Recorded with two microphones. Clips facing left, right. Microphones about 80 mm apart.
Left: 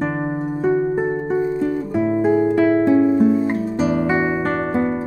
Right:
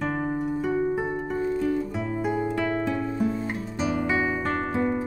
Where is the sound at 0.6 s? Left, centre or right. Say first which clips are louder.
Left 9 dB; left.